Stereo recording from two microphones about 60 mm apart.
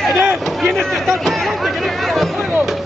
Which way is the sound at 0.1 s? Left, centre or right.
Right.